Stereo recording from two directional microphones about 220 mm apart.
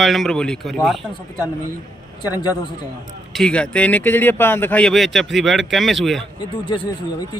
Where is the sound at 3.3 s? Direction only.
5° left (ahead or behind).